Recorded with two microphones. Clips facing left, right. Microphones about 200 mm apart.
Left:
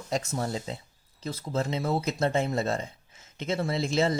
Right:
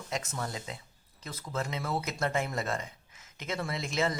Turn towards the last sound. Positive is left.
turn(degrees=30)  # may be behind; listen again after turning